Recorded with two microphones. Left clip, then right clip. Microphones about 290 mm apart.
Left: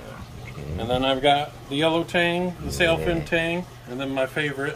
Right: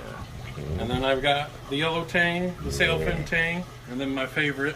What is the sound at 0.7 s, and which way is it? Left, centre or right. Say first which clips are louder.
Speech: left 2 dB; left.